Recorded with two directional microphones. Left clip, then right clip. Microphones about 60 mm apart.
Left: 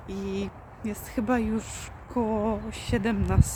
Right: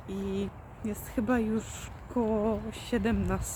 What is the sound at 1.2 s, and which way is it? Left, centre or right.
Speech, left.